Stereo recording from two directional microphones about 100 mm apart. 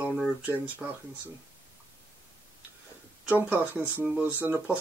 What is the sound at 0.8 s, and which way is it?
Speech, 5° right (ahead or behind).